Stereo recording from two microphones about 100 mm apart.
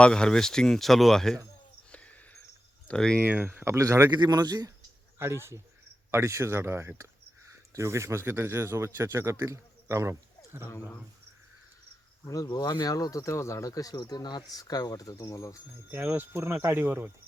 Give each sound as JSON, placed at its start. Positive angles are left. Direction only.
{"t": 0.0, "sound": "speech", "side_deg": 5}
{"t": 1.9, "sound": "a sound", "side_deg": 15}
{"t": 2.8, "sound": "speech", "side_deg": 10}
{"t": 3.2, "sound": "speech", "side_deg": -20}
{"t": 3.8, "sound": "speech", "side_deg": -30}
{"t": 4.1, "sound": "a man's voice", "side_deg": -45}
{"t": 5.2, "sound": "speech", "side_deg": -25}
{"t": 12.2, "sound": "speech", "side_deg": 35}
{"t": 15.9, "sound": "speech", "side_deg": -20}